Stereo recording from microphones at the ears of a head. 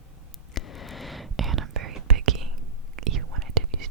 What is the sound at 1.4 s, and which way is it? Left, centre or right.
Whispering, right.